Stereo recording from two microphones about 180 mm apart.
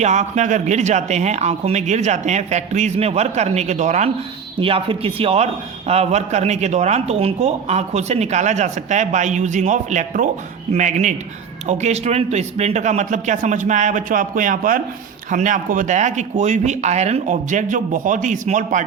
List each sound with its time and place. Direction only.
0.0 s a man's voice: 40° right (ahead or behind)